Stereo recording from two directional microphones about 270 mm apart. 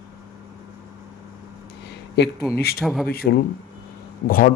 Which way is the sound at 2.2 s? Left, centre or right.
Left.